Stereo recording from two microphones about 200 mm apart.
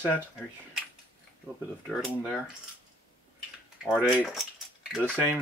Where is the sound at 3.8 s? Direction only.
5° right (ahead or behind).